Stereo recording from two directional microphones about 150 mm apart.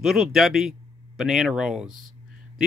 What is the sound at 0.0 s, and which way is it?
Speech, 5° right (ahead or behind).